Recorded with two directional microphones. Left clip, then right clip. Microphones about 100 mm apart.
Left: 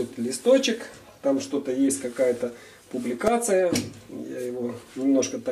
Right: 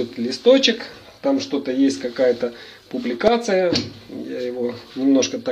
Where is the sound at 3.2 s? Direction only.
25° right (ahead or behind).